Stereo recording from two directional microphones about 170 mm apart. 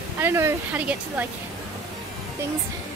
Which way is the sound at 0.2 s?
15° right (ahead or behind).